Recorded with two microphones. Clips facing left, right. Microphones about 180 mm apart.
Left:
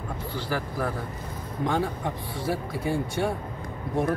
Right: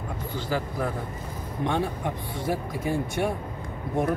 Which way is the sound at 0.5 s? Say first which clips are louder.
Right 1 dB; 20° right (ahead or behind).